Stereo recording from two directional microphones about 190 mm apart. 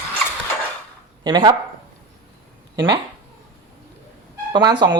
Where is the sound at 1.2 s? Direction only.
20° right (ahead or behind).